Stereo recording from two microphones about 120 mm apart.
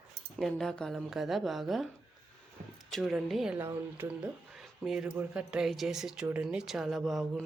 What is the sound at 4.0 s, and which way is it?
Speech, 15° right (ahead or behind).